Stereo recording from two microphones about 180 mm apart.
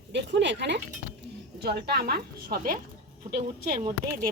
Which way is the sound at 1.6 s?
65° right (ahead or behind).